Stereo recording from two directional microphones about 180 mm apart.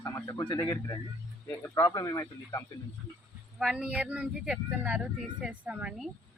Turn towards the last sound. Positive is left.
turn(degrees=-5)  # may be behind; listen again after turning